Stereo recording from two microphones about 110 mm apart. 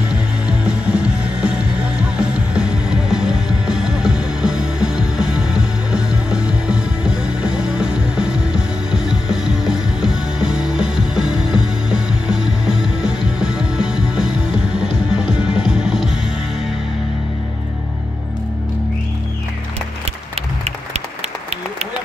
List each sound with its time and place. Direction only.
0.1 s music: 10° right (ahead or behind)